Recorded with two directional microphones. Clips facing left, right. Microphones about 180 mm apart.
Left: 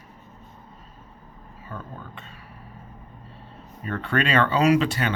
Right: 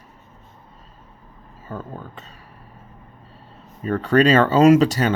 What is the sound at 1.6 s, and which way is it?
Speech, 40° right (ahead or behind).